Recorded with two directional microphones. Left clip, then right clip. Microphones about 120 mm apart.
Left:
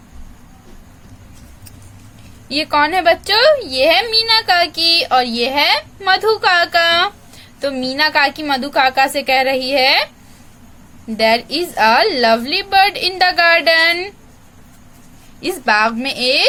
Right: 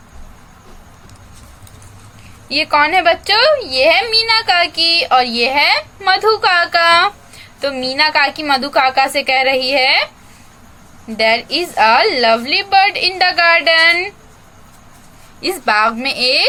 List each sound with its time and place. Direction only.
2.5 s a woman's voice: 45° left (ahead or behind)
11.1 s a woman's voice: 50° left (ahead or behind)
15.4 s speech: 35° left (ahead or behind)